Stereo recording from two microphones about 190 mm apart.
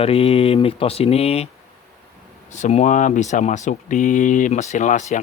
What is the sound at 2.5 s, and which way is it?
Speech, 40° left (ahead or behind).